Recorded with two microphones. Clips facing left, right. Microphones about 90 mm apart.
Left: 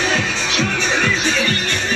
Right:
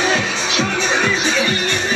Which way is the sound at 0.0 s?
5° right (ahead or behind).